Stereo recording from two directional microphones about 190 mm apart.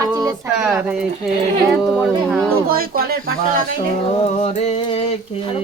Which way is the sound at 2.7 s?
50° right (ahead or behind).